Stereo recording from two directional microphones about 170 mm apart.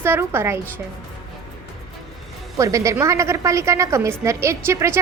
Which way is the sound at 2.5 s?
20° right (ahead or behind).